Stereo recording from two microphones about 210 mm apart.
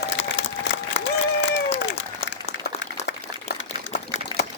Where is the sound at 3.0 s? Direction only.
55° left (ahead or behind).